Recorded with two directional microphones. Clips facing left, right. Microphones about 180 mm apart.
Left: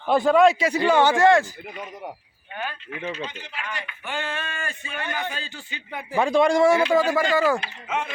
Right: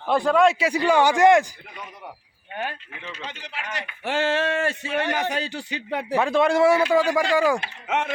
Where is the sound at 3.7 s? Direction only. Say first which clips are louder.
Right 9 dB; 85° right.